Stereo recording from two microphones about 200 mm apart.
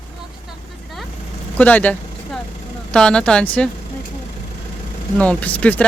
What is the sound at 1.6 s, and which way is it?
Speech, 5° left (ahead or behind).